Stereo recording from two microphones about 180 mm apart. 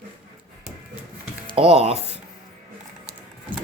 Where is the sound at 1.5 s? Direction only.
30° right (ahead or behind).